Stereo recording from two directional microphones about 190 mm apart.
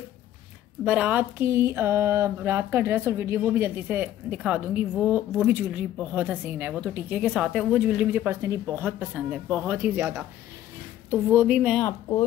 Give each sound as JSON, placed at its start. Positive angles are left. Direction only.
{"t": 0.8, "sound": "speech", "side_deg": -5}
{"t": 11.2, "sound": "a woman's voice", "side_deg": -10}
{"t": 11.8, "sound": "speech", "side_deg": 20}